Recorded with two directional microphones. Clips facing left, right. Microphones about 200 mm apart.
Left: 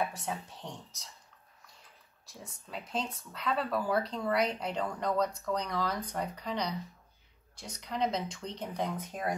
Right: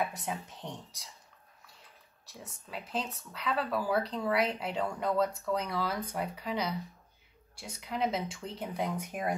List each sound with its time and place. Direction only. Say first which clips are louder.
0.1 s speech: even; 15° right (ahead or behind)
2.2 s speech: even; centre (ahead or behind)